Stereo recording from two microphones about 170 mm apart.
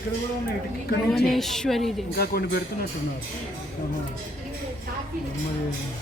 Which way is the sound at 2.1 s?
65° left (ahead or behind).